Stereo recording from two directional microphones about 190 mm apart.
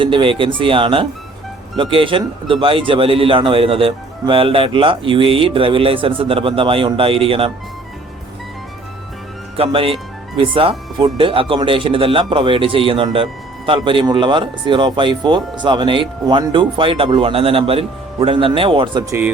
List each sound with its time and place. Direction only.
0.0 s speech: 25° right (ahead or behind)
9.6 s speech: 30° right (ahead or behind)